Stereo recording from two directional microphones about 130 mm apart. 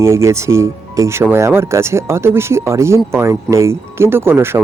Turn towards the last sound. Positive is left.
turn(degrees=-20)  # may be behind; listen again after turning